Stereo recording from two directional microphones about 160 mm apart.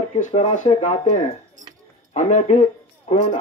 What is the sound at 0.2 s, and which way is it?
Speech, 45° left (ahead or behind).